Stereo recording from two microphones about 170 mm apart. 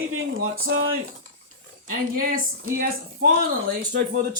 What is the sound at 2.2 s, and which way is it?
Speech, 55° right (ahead or behind).